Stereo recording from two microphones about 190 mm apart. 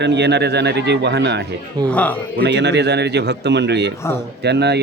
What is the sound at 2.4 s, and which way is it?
Speech, 65° right (ahead or behind).